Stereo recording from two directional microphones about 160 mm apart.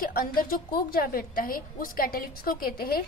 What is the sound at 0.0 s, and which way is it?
A woman's voice, 65° left (ahead or behind).